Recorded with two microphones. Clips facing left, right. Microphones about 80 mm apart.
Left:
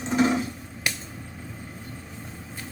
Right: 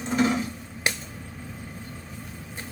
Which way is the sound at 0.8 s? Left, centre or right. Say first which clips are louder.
Right 2 dB; right.